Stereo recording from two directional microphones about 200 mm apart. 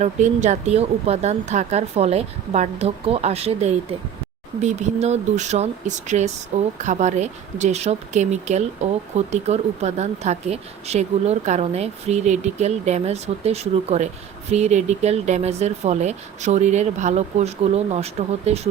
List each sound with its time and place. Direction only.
0.0 s speech: 35° right (ahead or behind)